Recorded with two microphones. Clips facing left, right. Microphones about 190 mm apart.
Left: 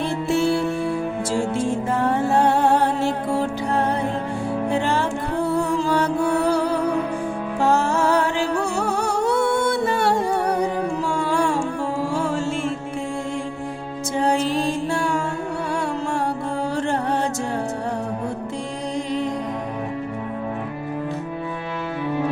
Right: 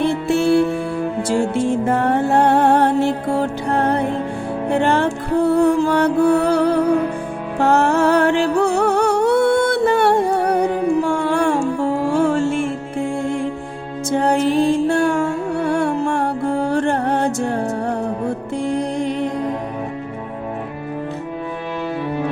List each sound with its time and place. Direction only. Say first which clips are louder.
0.0 s music: right 4 dB; 60° right (ahead or behind)
1.9 s music: right 2 dB; 60° right (ahead or behind)
14.1 s music: right 4 dB; 55° right (ahead or behind)
18.7 s music: right 5 dB; 60° right (ahead or behind)